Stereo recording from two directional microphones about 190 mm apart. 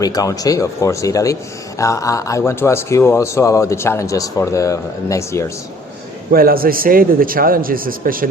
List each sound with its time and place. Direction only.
0.0 s speech: 20° left (ahead or behind)
6.3 s a man's voice: 50° right (ahead or behind)